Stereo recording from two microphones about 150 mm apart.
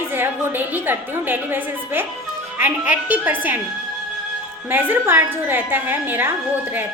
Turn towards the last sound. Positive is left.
turn(degrees=-15)  # may be behind; listen again after turning